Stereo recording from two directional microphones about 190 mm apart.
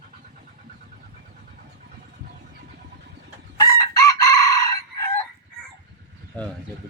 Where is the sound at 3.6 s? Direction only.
20° left (ahead or behind).